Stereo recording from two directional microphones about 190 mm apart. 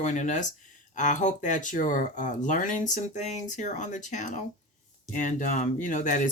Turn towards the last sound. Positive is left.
turn(degrees=40)  # may be behind; listen again after turning